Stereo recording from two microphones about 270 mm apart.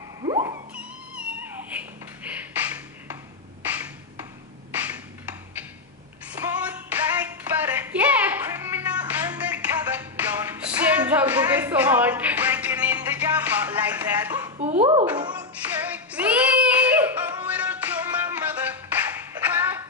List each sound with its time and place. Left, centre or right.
0.2 s cat: centre
3.6 s a sound: centre
6.3 s clapping: centre
14.6 s babbling: right
15.0 s music: centre
15.5 s child singing: centre